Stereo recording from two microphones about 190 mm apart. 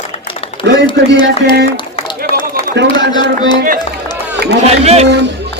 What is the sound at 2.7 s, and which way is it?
Speech, 65° right (ahead or behind).